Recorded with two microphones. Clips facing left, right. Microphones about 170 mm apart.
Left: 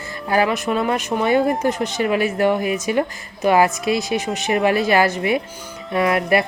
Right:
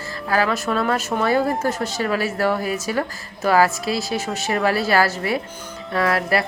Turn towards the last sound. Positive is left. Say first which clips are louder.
# left 3 dB
turn(degrees=20)  # may be behind; listen again after turning